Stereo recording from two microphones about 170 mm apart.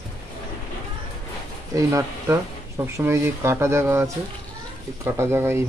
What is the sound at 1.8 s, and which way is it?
Speech, 20° right (ahead or behind).